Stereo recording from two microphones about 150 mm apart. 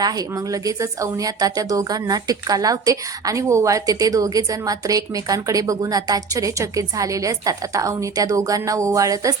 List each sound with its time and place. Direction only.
0.5 s a woman's voice: 20° right (ahead or behind)